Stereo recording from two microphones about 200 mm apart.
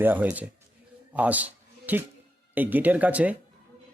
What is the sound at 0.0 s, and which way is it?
A man's voice, 10° right (ahead or behind).